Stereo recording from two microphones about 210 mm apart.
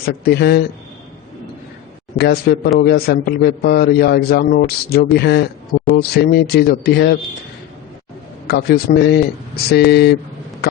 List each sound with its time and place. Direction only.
0.0 s a man's voice: 50° left (ahead or behind)
2.1 s a man's voice: 50° left (ahead or behind)
8.4 s a man's voice: 50° left (ahead or behind)